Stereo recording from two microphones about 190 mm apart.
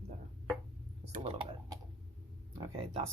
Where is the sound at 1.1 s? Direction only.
30° right (ahead or behind).